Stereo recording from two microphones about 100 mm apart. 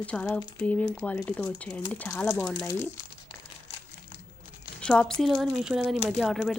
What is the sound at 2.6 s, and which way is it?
Speech, 25° left (ahead or behind).